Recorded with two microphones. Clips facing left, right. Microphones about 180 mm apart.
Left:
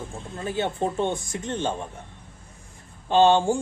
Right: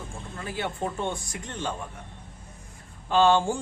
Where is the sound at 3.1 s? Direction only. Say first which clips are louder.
Left 3 dB; 20° left (ahead or behind).